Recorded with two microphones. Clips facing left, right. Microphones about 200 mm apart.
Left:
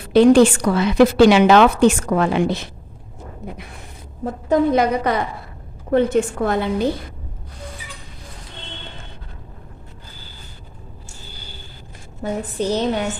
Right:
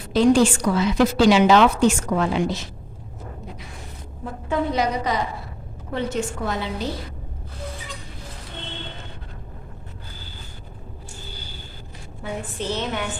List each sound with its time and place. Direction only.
0.1 s a woman's voice: 60° left (ahead or behind)
4.2 s a woman's voice: 40° left (ahead or behind)
12.2 s a woman's voice: 40° left (ahead or behind)